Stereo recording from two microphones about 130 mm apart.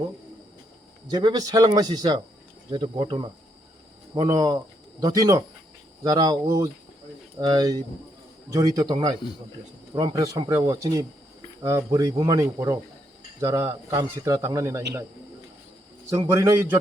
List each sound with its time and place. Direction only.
1.1 s speech: 30° right (ahead or behind)
4.1 s speech: 30° right (ahead or behind)
16.0 s speech: 20° right (ahead or behind)